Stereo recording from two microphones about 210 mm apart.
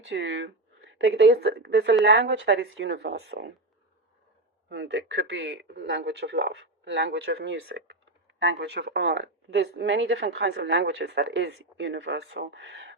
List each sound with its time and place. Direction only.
0.0 s speech: 60° right (ahead or behind)
4.7 s speech: 60° right (ahead or behind)